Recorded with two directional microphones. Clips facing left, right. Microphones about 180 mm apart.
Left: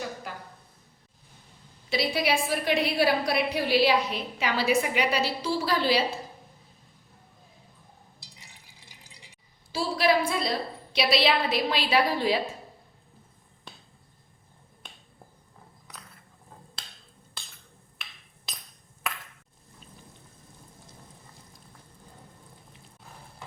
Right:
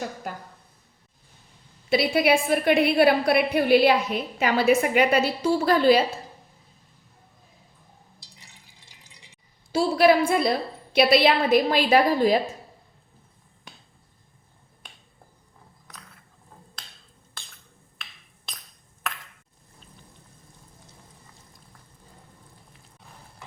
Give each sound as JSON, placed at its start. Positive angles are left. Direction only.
{"t": 0.3, "sound": "a sound", "side_deg": -45}
{"t": 1.9, "sound": "a woman's voice", "side_deg": -55}
{"t": 9.7, "sound": "a woman's voice", "side_deg": -50}